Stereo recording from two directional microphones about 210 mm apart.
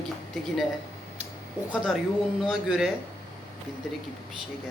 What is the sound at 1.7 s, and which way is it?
Speech, centre (ahead or behind).